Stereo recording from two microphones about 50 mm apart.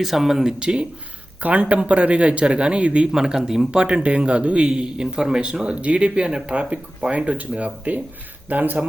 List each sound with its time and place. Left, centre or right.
0.0 s speech: centre
0.6 s speech: centre
1.4 s a man's voice: right
3.1 s a man's voice: centre; by 8.8 s right